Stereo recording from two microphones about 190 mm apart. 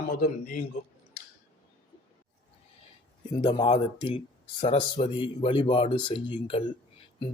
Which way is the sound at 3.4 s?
25° left (ahead or behind).